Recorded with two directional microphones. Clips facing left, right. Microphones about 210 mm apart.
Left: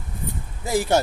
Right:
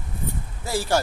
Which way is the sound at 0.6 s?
20° left (ahead or behind).